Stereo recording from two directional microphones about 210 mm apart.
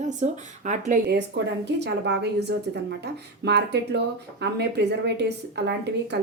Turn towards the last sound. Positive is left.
turn(degrees=-55)  # may be behind; listen again after turning